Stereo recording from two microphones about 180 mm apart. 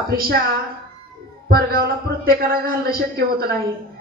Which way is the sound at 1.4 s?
55° right (ahead or behind).